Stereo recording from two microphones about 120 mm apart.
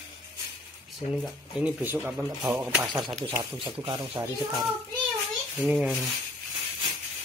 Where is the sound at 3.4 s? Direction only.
40° right (ahead or behind).